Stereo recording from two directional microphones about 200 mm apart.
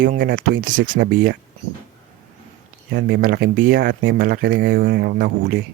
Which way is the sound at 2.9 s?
55° right (ahead or behind).